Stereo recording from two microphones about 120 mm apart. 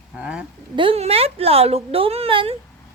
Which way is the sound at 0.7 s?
45° right (ahead or behind).